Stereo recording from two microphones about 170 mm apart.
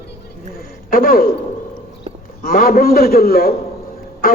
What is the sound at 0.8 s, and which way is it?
Speech, 60° left (ahead or behind).